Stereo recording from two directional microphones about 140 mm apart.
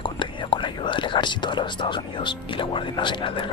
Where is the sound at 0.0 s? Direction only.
35° left (ahead or behind).